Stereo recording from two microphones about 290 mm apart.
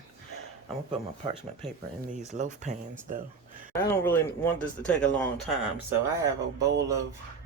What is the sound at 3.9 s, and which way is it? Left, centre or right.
Speech, centre.